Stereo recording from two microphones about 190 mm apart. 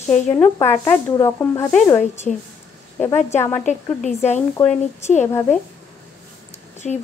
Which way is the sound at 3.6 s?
40° left (ahead or behind).